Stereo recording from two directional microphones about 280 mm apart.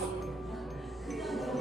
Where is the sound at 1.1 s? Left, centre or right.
Centre.